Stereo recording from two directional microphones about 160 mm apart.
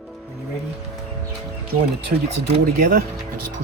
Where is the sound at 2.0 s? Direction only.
75° right (ahead or behind).